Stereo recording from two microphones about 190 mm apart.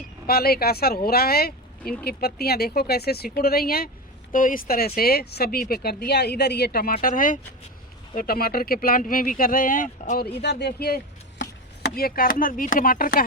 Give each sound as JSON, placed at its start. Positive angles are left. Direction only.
{"t": 0.3, "sound": "a woman's voice", "side_deg": 55}
{"t": 10.4, "sound": "chopping", "side_deg": 60}